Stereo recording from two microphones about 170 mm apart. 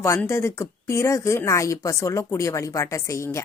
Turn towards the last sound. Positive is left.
turn(degrees=15)  # may be behind; listen again after turning